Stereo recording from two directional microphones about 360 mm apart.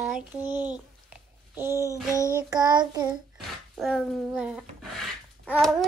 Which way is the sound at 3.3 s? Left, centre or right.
Centre.